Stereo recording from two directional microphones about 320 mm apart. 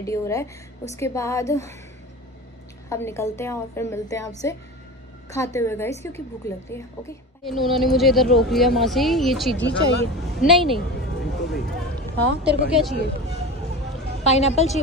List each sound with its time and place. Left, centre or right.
0.0 s a woman's voice: centre
2.9 s a woman's voice: centre
5.3 s a woman's voice: centre
9.6 s speech: left
10.4 s a woman's voice: centre
10.8 s a sound: left
12.4 s a woman's voice: centre
14.2 s a woman's voice: left